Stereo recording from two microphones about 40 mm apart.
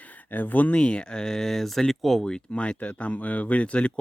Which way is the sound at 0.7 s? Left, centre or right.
Left.